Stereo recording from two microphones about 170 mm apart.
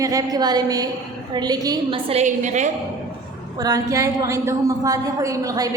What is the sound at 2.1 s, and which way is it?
Speech, 45° right (ahead or behind).